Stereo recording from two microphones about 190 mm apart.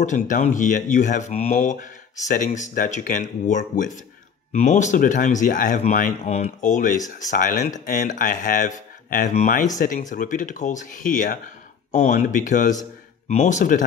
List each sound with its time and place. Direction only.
0.0 s speech: 40° left (ahead or behind)